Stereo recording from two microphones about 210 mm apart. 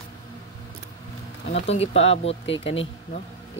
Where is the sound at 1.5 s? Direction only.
30° left (ahead or behind).